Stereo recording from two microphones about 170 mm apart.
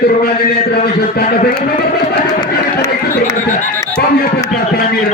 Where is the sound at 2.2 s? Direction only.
20° left (ahead or behind).